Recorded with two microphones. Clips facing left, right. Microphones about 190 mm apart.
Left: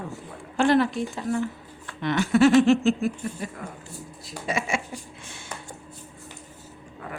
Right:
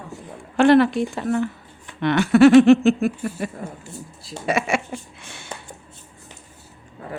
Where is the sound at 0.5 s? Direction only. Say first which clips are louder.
Right 6 dB; 70° right (ahead or behind).